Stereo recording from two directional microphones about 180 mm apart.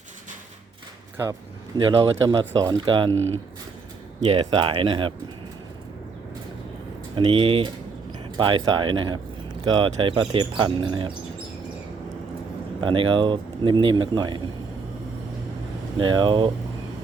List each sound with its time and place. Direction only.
1.8 s speech: 20° right (ahead or behind)
3.1 s speech: 10° left (ahead or behind)
4.4 s speech: 25° right (ahead or behind)
7.3 s speech: 30° right (ahead or behind)
12.8 s speech: 30° right (ahead or behind)
16.0 s speech: 25° right (ahead or behind)